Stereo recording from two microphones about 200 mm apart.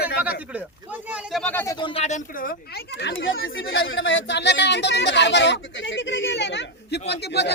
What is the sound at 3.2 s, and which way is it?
Speech, 75° left (ahead or behind).